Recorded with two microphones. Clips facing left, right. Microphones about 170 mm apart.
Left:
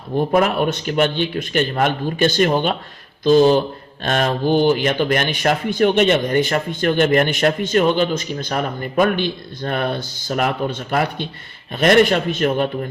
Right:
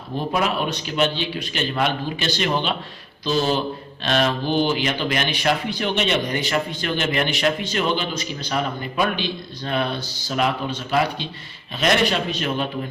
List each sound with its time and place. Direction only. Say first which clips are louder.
0.3 s speech: left 5 dB; 50° left (ahead or behind)